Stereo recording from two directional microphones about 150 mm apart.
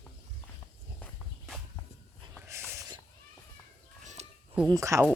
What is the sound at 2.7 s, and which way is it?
Cat, 20° right (ahead or behind).